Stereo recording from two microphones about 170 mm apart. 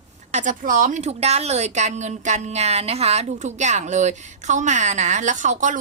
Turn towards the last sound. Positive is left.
turn(degrees=-45)  # may be behind; listen again after turning